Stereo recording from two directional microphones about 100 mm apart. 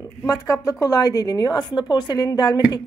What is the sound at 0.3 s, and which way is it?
A woman's voice, 35° left (ahead or behind).